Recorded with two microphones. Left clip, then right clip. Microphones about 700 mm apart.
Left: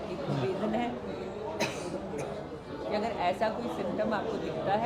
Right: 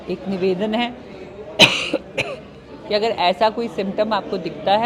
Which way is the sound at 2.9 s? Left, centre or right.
Right.